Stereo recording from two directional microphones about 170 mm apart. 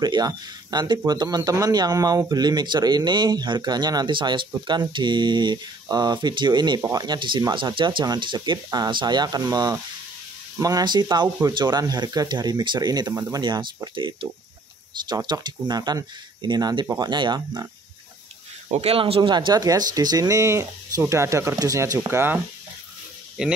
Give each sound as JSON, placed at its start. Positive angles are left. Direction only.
{"t": 0.0, "sound": "speech", "side_deg": -25}
{"t": 18.7, "sound": "speech", "side_deg": -35}